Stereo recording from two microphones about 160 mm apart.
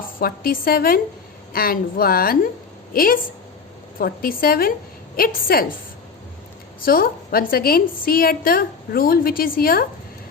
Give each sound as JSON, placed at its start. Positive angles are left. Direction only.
{"t": 0.2, "sound": "a woman's voice", "side_deg": 65}
{"t": 6.8, "sound": "a woman's voice", "side_deg": 65}